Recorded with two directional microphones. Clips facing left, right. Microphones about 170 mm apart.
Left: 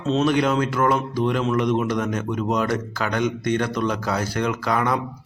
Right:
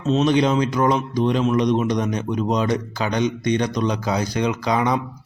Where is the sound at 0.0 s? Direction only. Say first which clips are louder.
Right 2 dB; 5° right (ahead or behind).